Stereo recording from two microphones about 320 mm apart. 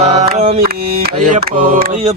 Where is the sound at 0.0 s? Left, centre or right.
Right.